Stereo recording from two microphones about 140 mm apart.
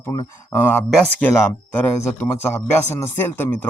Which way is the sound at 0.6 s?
10° left (ahead or behind).